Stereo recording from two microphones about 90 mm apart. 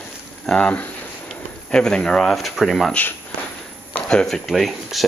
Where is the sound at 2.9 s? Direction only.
20° left (ahead or behind); by 5.0 s centre (ahead or behind).